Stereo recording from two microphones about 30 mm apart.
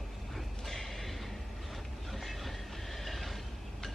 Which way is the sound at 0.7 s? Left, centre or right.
Centre.